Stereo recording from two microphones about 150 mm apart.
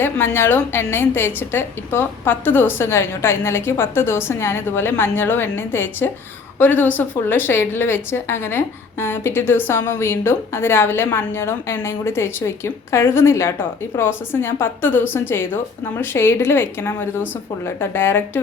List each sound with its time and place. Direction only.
0.0 s a woman's voice: 15° left (ahead or behind)